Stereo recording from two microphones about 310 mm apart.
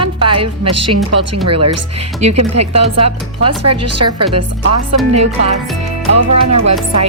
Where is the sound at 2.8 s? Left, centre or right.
Centre.